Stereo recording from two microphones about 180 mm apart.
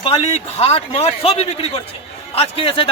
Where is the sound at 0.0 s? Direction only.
35° left (ahead or behind).